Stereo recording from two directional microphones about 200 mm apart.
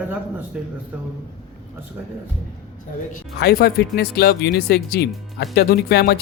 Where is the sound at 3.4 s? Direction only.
50° left (ahead or behind).